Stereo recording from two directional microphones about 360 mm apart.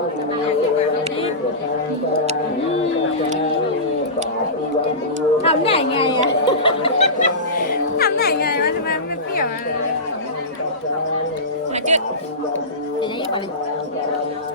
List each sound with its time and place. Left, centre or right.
5.4 s chatter: centre
7.9 s a sound: left
11.7 s music: centre